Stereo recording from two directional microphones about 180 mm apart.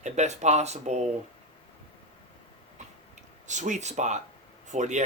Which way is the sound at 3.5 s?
40° right (ahead or behind).